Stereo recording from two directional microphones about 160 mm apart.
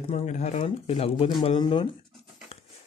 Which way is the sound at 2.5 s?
40° left (ahead or behind).